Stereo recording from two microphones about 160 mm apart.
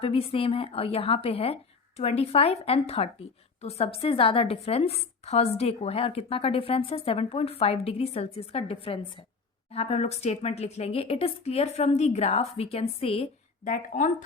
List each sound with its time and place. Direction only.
0.0 s a woman's voice: 35° left (ahead or behind)
13.7 s speech: 55° left (ahead or behind)